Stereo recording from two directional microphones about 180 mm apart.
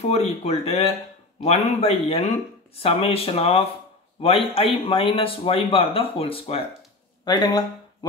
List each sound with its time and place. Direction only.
0.0 s speech: 35° left (ahead or behind)